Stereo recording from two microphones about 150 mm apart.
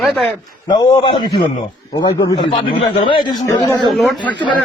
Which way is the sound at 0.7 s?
30° left (ahead or behind).